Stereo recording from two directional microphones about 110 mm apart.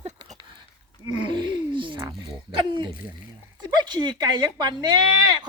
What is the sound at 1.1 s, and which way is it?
Speech, 45° right (ahead or behind).